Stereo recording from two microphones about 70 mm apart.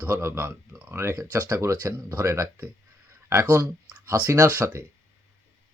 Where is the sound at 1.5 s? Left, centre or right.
Right.